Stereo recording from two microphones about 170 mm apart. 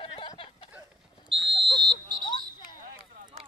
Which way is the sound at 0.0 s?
30° left (ahead or behind).